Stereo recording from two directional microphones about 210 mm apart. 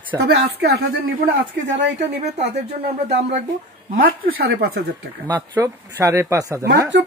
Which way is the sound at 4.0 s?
45° right (ahead or behind).